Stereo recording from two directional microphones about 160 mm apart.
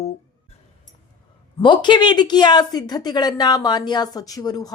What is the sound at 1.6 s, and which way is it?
Speech, 30° left (ahead or behind).